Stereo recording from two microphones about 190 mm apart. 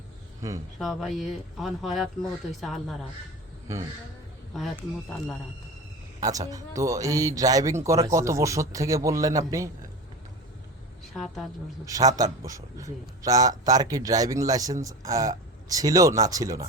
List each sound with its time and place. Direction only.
0.8 s speech: centre (ahead or behind)
4.5 s speech: centre (ahead or behind)
6.1 s speech: 20° right (ahead or behind)
11.0 s a woman's voice: centre (ahead or behind)
11.9 s a man's voice: 20° right (ahead or behind)